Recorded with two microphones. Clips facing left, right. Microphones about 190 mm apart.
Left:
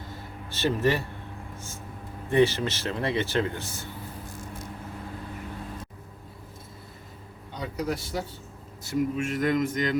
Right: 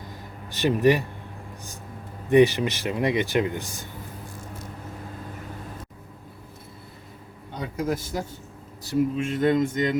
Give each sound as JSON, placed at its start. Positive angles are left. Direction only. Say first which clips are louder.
{"t": 0.5, "sound": "a man's voice", "louder": "right 5 dB", "side_deg": -15}
{"t": 2.3, "sound": "a man's voice", "louder": "right 5 dB", "side_deg": -15}
{"t": 7.5, "sound": "speech", "louder": "right 3 dB", "side_deg": -50}
{"t": 8.9, "sound": "speech", "louder": "right 3 dB", "side_deg": -30}